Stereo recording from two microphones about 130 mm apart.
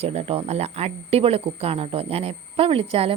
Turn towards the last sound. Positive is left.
turn(degrees=-45)  # may be behind; listen again after turning